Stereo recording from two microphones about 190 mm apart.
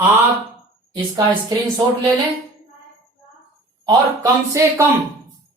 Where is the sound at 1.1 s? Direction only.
20° right (ahead or behind).